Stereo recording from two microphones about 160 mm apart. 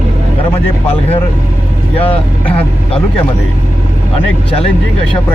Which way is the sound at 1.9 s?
35° left (ahead or behind).